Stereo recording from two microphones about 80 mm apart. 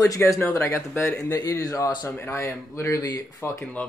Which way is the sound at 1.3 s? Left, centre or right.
Left.